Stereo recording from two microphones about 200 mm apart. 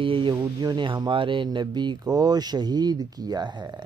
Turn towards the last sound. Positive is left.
turn(degrees=-20)  # may be behind; listen again after turning